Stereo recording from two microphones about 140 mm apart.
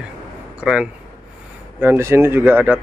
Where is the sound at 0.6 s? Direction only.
5° right (ahead or behind).